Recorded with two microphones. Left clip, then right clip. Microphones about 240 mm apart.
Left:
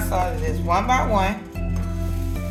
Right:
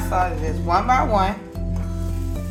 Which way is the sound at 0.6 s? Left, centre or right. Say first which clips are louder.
Right 2 dB; right.